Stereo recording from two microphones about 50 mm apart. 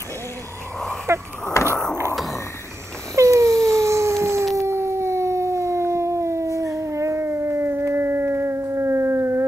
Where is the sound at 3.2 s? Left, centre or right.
Right.